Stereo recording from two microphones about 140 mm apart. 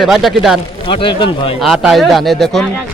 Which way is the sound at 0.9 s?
40° left (ahead or behind).